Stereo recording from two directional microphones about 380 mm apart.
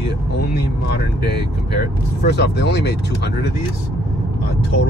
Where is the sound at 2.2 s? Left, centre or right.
Left.